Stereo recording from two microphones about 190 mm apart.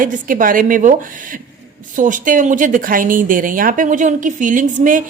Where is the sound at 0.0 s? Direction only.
45° right (ahead or behind).